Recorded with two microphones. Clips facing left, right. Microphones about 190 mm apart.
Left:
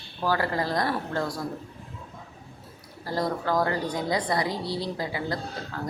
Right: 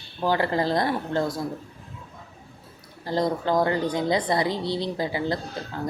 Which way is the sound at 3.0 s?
25° right (ahead or behind).